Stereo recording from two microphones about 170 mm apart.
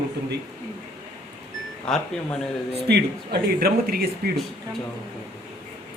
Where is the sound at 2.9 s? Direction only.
70° right (ahead or behind).